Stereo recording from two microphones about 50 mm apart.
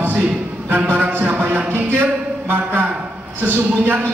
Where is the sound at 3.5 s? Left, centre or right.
Right.